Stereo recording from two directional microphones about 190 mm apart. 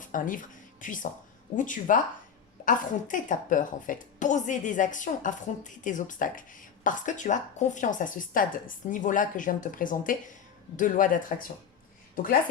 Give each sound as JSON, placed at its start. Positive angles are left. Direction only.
{"t": 0.1, "sound": "a woman's voice", "side_deg": 45}